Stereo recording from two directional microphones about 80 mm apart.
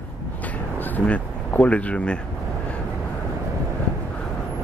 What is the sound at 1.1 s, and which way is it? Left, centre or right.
Speech, centre.